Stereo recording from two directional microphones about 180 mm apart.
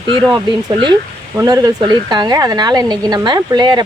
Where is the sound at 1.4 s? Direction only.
20° right (ahead or behind).